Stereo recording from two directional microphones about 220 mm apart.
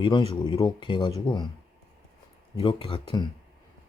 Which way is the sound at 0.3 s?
20° left (ahead or behind).